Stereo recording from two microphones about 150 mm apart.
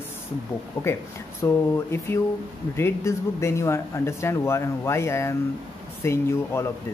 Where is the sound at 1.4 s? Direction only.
15° left (ahead or behind).